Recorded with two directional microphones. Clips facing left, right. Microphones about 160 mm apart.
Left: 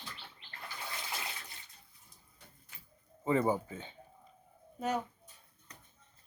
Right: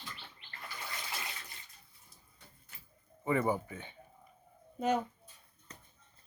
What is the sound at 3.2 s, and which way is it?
Speech, 25° left (ahead or behind).